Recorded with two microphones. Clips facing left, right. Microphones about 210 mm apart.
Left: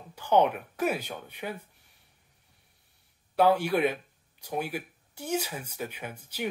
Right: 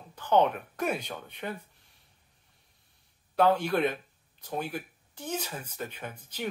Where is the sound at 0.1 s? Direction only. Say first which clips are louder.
Left 1 dB; 10° left (ahead or behind).